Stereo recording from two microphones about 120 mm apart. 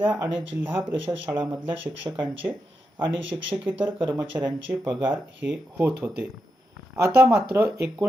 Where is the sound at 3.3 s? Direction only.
25° right (ahead or behind).